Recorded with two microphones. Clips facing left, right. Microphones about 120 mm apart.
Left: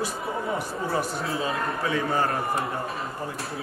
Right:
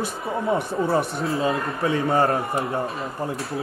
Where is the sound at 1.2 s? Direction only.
Centre (ahead or behind).